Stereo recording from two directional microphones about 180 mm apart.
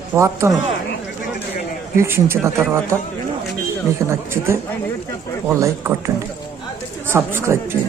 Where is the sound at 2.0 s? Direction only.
15° right (ahead or behind).